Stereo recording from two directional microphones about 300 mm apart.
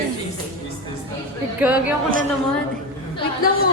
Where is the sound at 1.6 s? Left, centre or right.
Centre.